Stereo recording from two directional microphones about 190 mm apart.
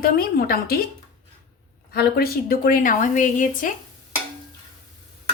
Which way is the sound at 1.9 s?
55° left (ahead or behind).